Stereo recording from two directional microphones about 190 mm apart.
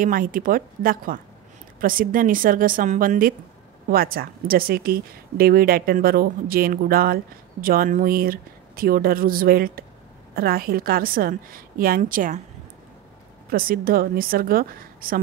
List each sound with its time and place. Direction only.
0.0 s a woman's voice: 45° right (ahead or behind)
13.5 s a woman's voice: 50° right (ahead or behind)